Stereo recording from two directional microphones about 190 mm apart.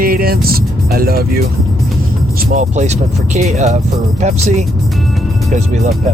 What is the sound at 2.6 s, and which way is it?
Speech, 35° right (ahead or behind).